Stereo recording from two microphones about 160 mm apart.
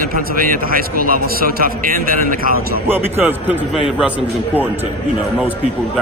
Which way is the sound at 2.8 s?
10° right (ahead or behind).